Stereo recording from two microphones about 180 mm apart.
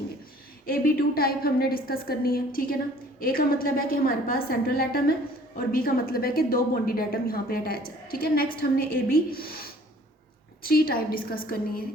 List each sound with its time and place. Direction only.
0.6 s a woman's voice: 55° left (ahead or behind)